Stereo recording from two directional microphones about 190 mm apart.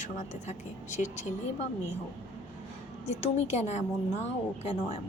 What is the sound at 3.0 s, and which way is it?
Speech, 35° left (ahead or behind).